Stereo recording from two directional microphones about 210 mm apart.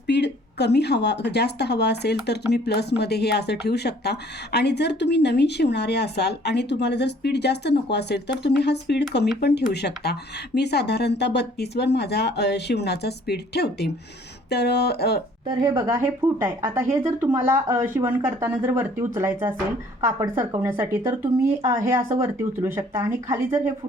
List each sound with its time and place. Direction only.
0.1 s speech: 55° left (ahead or behind)
15.4 s speech: 15° right (ahead or behind)